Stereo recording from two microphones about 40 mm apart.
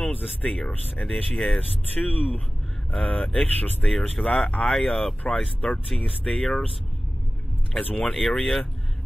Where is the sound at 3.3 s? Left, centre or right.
Left.